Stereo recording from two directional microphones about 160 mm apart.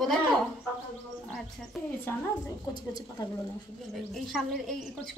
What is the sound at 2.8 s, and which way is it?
Speech, 25° left (ahead or behind).